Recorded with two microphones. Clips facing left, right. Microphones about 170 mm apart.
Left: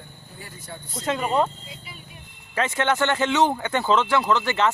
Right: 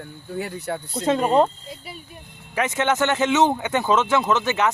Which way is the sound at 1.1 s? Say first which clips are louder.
Right 5 dB; 35° right (ahead or behind).